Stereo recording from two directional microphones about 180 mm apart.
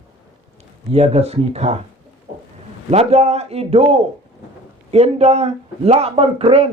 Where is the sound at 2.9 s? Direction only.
35° right (ahead or behind).